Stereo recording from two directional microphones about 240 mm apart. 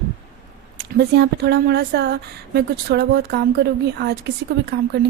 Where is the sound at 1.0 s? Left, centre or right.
Right.